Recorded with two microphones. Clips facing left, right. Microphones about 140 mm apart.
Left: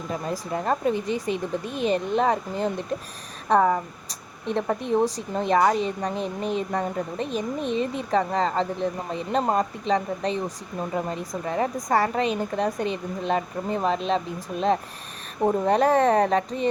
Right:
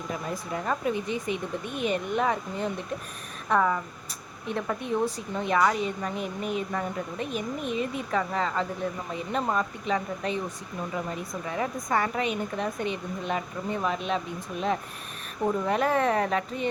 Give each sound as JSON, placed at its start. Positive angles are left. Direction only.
{"t": 0.1, "sound": "speech", "side_deg": 35}
{"t": 15.4, "sound": "speech", "side_deg": 35}